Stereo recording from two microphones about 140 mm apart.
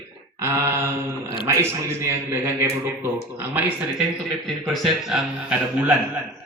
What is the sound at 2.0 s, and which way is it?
A man's voice, 20° right (ahead or behind).